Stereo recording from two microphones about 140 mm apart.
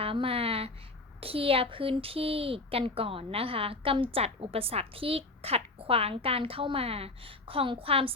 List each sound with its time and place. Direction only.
0.0 s speech: 40° right (ahead or behind)